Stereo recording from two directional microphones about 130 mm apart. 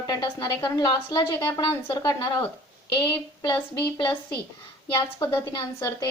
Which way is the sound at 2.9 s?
35° left (ahead or behind).